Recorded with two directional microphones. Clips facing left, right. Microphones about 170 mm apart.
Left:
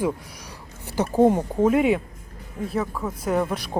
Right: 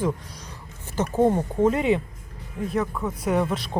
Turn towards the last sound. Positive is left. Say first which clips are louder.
# even
turn(degrees=5)  # may be behind; listen again after turning